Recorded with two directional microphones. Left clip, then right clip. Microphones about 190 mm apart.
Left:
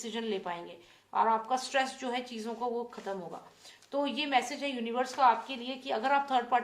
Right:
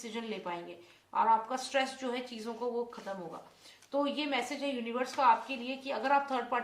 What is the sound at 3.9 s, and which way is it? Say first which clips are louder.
A woman's voice: left 3 dB; 45° left (ahead or behind).